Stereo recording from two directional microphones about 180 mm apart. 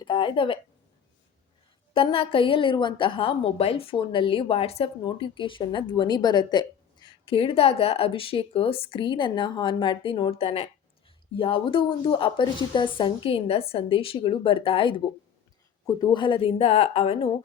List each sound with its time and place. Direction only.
0.0 s speech: 25° left (ahead or behind)
1.9 s a woman's voice: 30° left (ahead or behind)